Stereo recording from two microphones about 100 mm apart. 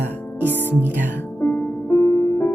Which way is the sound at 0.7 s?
20° left (ahead or behind).